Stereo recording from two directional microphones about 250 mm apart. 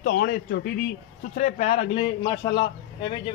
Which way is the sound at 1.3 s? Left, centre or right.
Left.